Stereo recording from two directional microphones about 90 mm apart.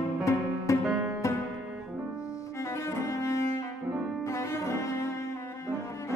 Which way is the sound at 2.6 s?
35° left (ahead or behind).